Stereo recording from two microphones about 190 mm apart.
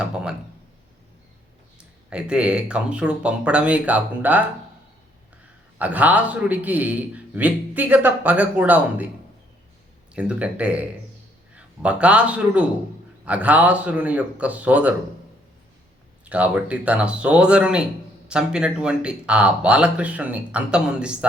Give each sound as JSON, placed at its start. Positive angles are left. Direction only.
{"t": 0.0, "sound": "speech", "side_deg": -5}
{"t": 1.8, "sound": "speech", "side_deg": -5}
{"t": 5.8, "sound": "a man's voice", "side_deg": -10}
{"t": 10.2, "sound": "a man's voice", "side_deg": -5}
{"t": 16.3, "sound": "speech", "side_deg": -5}